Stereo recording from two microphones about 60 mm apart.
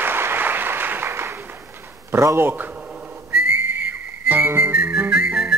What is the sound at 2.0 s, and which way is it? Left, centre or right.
Speech, right.